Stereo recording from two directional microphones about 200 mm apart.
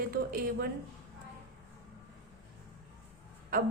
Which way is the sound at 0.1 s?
45° right (ahead or behind).